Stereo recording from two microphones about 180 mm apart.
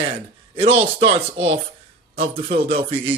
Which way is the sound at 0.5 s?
30° right (ahead or behind).